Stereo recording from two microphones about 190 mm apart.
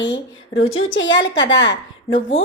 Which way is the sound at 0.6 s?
90° left.